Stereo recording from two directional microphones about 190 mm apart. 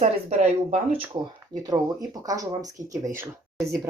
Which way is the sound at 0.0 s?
35° right (ahead or behind).